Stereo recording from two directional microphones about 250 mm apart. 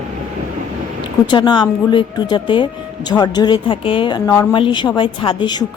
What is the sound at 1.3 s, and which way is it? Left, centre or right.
A woman's voice, centre.